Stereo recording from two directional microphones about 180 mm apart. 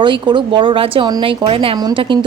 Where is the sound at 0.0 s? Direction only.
25° right (ahead or behind).